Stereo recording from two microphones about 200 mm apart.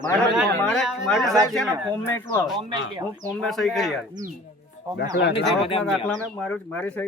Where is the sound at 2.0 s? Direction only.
10° left (ahead or behind).